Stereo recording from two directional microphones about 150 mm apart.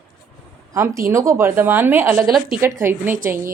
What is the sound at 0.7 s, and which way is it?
Speech, 20° right (ahead or behind).